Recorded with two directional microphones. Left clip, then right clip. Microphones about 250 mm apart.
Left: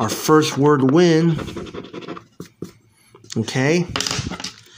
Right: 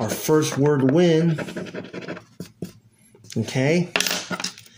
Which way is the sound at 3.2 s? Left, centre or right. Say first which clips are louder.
Left 3 dB; centre.